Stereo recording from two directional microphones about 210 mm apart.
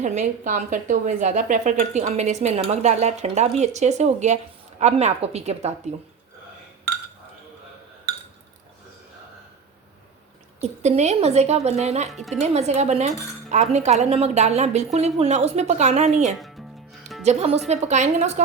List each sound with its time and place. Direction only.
0.0 s speech: 35° right (ahead or behind)
10.6 s speech: 30° right (ahead or behind)
12.1 s speech: centre (ahead or behind)
12.4 s speech: 30° right (ahead or behind)
16.4 s music: centre (ahead or behind)
17.2 s speech: 30° right (ahead or behind)